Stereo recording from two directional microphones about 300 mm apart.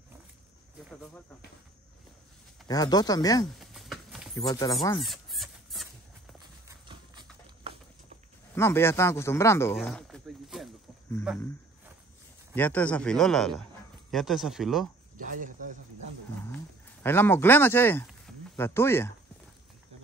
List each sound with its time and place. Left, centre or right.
0.8 s cricket: centre
2.7 s speech: centre
3.5 s clip-clop: centre
4.4 s speech: centre
5.0 s fowl: centre
6.4 s clip-clop: centre
8.5 s speech: centre
12.5 s speech: centre
15.1 s speech: right
16.4 s speech: centre